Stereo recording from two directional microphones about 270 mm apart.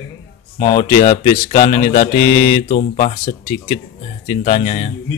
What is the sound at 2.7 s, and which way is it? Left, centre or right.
Speech, left.